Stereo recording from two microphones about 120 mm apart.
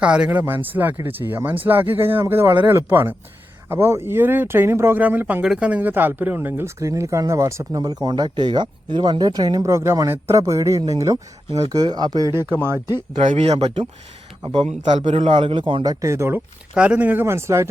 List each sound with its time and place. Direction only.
0.0 s speech: 10° right (ahead or behind); by 12.3 s 35° right (ahead or behind)
12.3 s speech: 20° right (ahead or behind)
13.1 s speech: 65° right (ahead or behind)
15.0 s speech: 55° right (ahead or behind)
15.8 s speech: 30° right (ahead or behind)
16.7 s speech: 10° right (ahead or behind)